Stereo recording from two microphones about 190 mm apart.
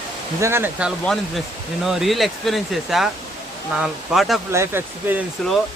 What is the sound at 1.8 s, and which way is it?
Speech, centre (ahead or behind).